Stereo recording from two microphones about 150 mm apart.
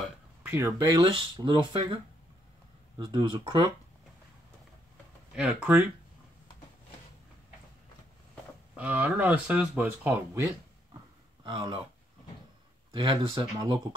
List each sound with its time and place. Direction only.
0.0 s a sound: 10° right (ahead or behind)
0.9 s speech: 30° right (ahead or behind)
3.0 s speech: 30° right (ahead or behind)
5.3 s speech: 10° right (ahead or behind)
8.7 s speech: 10° right (ahead or behind)
11.4 s speech: 35° right (ahead or behind)
12.9 s speech: 30° right (ahead or behind)